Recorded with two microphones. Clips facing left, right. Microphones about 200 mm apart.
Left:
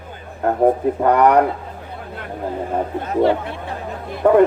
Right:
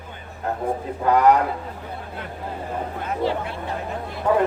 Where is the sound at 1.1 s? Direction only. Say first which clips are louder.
Left 1 dB; 60° left (ahead or behind).